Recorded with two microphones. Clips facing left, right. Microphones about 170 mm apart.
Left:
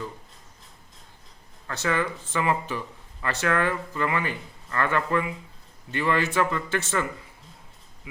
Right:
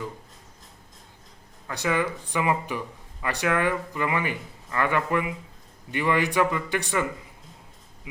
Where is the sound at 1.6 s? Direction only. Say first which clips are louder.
Right 1 dB; 15° right (ahead or behind).